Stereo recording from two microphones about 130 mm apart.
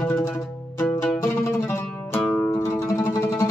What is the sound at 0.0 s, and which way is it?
Music, 20° left (ahead or behind).